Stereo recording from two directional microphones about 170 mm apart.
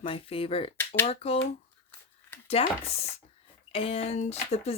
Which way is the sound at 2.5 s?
35° left (ahead or behind).